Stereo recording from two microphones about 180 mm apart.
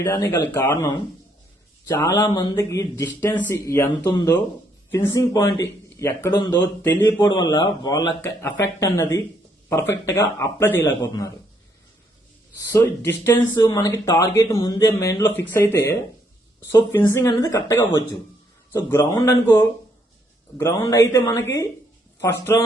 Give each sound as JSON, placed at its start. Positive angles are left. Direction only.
{"t": 0.1, "sound": "a man's voice", "side_deg": 15}
{"t": 12.5, "sound": "a man's voice", "side_deg": 15}